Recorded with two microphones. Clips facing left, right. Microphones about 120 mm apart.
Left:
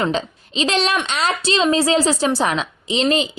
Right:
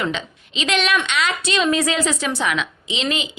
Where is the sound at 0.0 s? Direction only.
35° left (ahead or behind).